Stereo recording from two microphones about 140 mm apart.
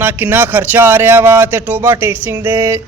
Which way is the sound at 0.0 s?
15° right (ahead or behind).